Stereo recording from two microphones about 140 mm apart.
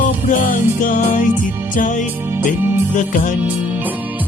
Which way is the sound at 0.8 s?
65° left (ahead or behind).